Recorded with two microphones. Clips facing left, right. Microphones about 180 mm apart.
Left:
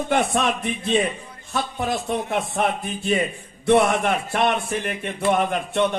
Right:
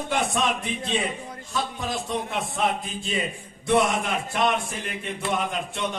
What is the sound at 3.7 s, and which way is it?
A man's voice, 55° left (ahead or behind).